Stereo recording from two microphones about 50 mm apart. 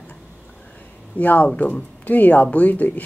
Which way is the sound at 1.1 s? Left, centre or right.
Left.